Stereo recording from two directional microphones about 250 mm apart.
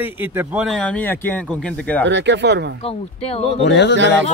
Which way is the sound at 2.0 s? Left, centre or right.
Right.